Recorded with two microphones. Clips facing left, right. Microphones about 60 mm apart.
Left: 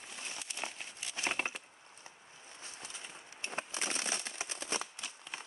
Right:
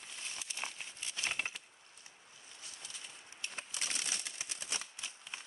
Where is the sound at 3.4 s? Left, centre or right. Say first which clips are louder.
Left 5 dB; left.